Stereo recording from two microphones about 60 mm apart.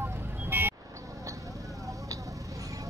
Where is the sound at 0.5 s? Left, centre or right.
Right.